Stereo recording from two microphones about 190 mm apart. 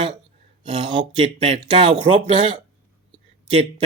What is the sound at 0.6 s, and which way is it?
A man's voice, 25° right (ahead or behind).